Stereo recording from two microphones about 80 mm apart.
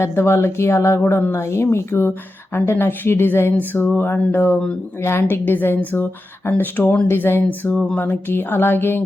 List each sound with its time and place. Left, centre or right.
0.0 s a woman's voice: left